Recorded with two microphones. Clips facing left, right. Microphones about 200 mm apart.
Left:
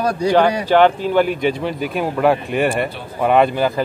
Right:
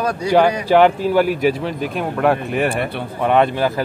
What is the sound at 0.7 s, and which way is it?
Speech, 10° right (ahead or behind).